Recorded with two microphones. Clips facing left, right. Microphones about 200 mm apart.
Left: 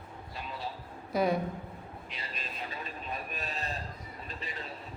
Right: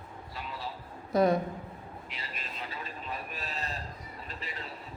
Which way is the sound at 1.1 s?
Centre (ahead or behind).